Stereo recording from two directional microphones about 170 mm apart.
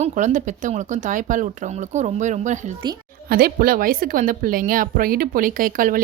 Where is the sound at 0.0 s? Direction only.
45° right (ahead or behind).